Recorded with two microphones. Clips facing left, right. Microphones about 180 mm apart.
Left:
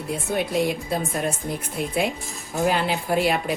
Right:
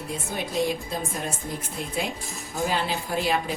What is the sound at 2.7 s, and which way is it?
Speech, 60° left (ahead or behind).